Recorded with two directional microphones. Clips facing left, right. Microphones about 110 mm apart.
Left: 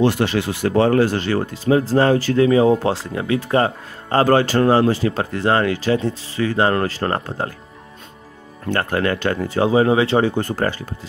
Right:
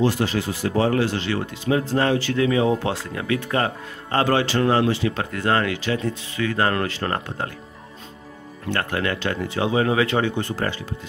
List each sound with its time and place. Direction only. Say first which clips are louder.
0.0 s speech: left 4 dB; 70° left (ahead or behind); by 7.5 s 35° left (ahead or behind)
8.6 s speech: left 4 dB; 40° left (ahead or behind)